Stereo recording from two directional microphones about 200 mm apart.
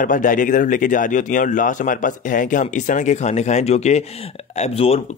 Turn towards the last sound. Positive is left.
turn(degrees=30)  # may be behind; listen again after turning